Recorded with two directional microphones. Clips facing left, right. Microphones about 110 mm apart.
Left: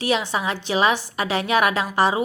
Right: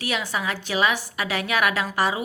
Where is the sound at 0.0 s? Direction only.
25° left (ahead or behind).